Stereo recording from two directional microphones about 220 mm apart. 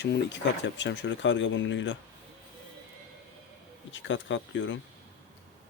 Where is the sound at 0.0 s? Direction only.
55° left (ahead or behind).